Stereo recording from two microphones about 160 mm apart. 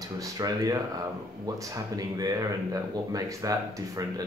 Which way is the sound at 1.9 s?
20° right (ahead or behind).